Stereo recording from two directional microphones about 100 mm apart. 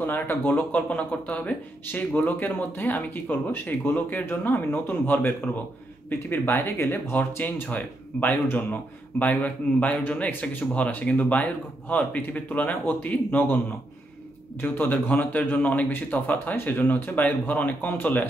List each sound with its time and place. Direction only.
0.0 s speech: 20° left (ahead or behind)